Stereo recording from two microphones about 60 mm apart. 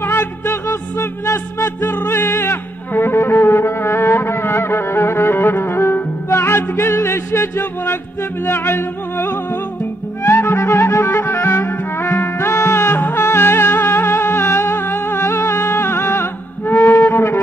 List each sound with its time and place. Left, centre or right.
0.0 s music: left
1.8 s music: left